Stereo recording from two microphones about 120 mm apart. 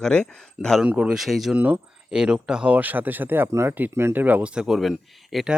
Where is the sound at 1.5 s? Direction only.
10° right (ahead or behind).